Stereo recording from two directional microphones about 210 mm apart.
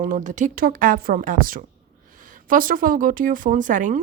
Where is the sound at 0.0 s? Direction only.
40° right (ahead or behind).